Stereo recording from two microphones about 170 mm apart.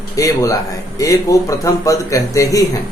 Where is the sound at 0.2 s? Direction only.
20° left (ahead or behind).